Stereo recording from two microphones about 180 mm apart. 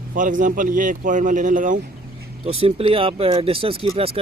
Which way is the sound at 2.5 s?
30° right (ahead or behind).